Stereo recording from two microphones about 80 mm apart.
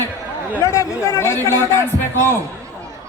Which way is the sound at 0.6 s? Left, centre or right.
Left.